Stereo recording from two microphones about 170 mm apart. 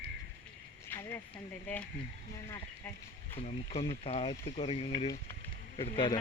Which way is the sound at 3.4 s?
35° left (ahead or behind).